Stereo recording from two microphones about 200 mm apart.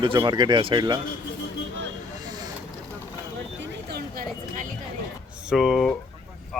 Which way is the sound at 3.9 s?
50° right (ahead or behind).